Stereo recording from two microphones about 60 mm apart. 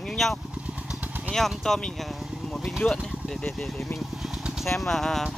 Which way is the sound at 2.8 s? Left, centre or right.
Left.